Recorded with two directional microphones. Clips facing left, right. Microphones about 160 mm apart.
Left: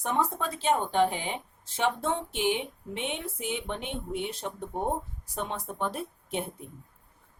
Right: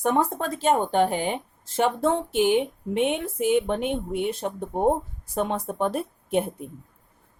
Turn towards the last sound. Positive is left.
turn(degrees=-50)  # may be behind; listen again after turning